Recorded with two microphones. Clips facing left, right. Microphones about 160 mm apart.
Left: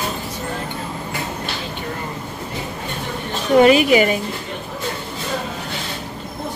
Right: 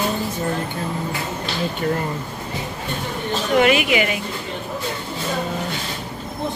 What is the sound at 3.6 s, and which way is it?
Speech, 35° left (ahead or behind).